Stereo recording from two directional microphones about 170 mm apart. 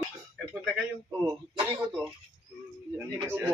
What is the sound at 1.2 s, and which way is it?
Speech, 25° right (ahead or behind).